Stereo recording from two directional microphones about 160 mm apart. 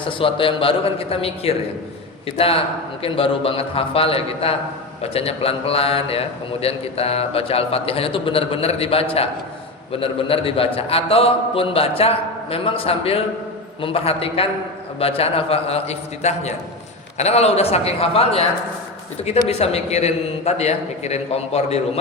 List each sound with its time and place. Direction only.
0.0 s a man's voice: 35° left (ahead or behind)
19.5 s a man's voice: 40° left (ahead or behind)